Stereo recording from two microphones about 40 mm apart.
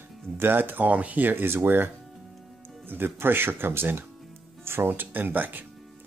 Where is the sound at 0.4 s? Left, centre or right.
Right.